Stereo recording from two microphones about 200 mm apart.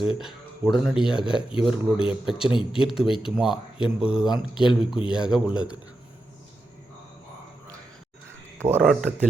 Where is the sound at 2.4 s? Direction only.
25° left (ahead or behind).